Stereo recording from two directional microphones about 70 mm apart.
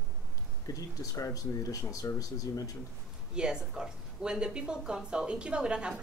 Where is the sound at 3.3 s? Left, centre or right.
Centre.